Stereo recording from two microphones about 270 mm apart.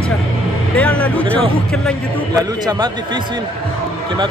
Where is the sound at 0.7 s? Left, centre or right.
Centre.